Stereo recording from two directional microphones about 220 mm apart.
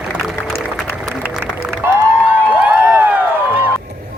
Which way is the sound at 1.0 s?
Centre (ahead or behind).